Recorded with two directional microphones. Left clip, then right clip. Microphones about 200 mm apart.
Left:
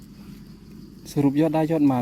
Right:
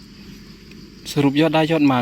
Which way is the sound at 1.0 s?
Centre (ahead or behind).